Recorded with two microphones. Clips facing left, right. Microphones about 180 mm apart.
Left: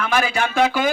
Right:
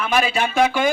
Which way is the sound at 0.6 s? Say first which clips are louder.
Right 1 dB; centre (ahead or behind).